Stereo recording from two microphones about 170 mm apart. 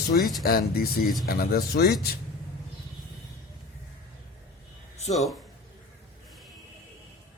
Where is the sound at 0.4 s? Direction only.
60° left (ahead or behind).